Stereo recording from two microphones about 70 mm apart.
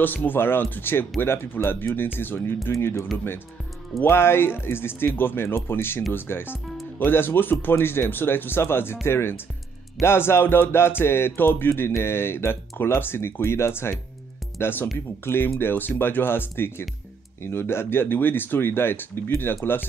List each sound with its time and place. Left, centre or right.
0.0 s speech: left
1.2 s music: left
7.1 s speech: left
7.6 s music: left